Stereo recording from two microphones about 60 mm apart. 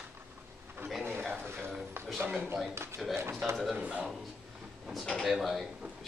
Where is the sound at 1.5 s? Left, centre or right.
Right.